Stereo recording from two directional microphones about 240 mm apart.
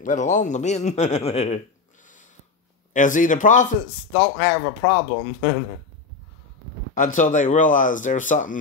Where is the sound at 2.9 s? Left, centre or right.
Left.